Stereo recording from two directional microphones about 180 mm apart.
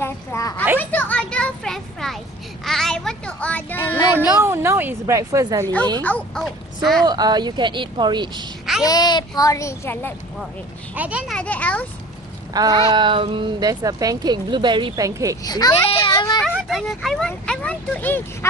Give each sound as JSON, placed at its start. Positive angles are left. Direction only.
{"t": 0.0, "sound": "a sound", "side_deg": 15}
{"t": 2.6, "sound": "child singing", "side_deg": 0}
{"t": 4.2, "sound": "a woman's voice", "side_deg": -15}
{"t": 6.0, "sound": "speech", "side_deg": 5}
{"t": 7.1, "sound": "speech", "side_deg": -20}
{"t": 8.8, "sound": "a child's voice", "side_deg": 20}
{"t": 11.0, "sound": "speech", "side_deg": -5}
{"t": 11.3, "sound": "speech", "side_deg": 10}
{"t": 12.6, "sound": "speech", "side_deg": -20}
{"t": 15.4, "sound": "a child's voice", "side_deg": 20}
{"t": 16.4, "sound": "speech", "side_deg": -5}